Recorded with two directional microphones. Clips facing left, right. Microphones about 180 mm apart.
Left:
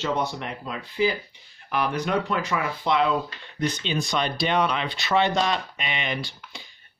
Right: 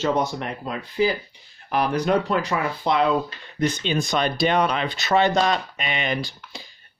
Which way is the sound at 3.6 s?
50° right (ahead or behind).